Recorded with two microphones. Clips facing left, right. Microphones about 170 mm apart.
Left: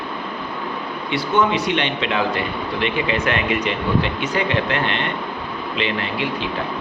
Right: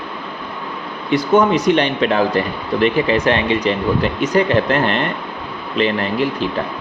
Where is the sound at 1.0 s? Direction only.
45° right (ahead or behind).